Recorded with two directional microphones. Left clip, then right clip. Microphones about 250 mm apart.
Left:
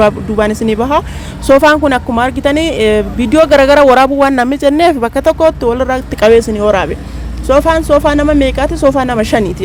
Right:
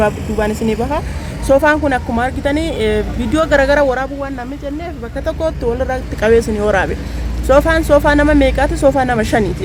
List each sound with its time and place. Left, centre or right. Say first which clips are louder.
0.0 s speech: left 5 dB; left